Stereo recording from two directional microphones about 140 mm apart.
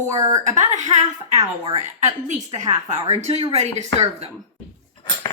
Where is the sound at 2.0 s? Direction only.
60° right (ahead or behind).